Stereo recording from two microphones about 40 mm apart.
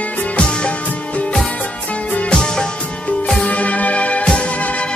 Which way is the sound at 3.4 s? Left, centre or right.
Left.